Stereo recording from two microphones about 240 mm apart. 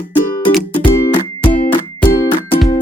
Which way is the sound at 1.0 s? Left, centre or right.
Centre.